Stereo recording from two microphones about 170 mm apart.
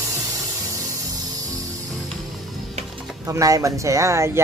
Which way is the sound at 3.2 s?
20° right (ahead or behind).